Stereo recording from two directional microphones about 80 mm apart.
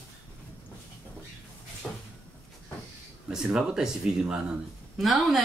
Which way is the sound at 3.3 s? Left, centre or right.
Centre.